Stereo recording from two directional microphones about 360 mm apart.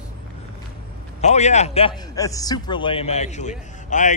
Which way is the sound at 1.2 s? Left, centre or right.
Centre.